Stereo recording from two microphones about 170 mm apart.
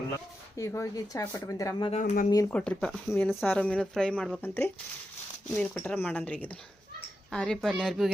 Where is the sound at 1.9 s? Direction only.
50° left (ahead or behind).